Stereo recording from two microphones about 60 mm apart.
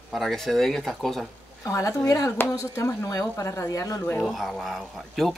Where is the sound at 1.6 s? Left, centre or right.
Left.